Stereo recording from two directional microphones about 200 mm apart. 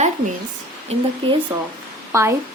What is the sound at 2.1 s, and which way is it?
Speech, 15° right (ahead or behind).